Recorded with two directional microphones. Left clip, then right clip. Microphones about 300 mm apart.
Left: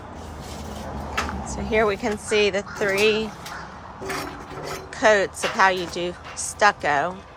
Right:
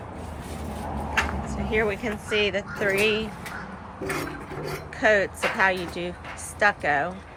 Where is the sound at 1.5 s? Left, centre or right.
Centre.